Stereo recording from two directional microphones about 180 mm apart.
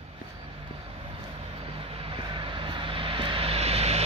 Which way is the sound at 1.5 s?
30° right (ahead or behind).